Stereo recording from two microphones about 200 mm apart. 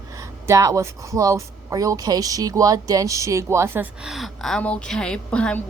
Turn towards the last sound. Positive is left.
turn(degrees=5)  # may be behind; listen again after turning